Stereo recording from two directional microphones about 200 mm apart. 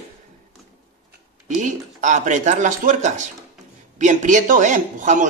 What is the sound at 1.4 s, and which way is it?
Speech, 40° right (ahead or behind).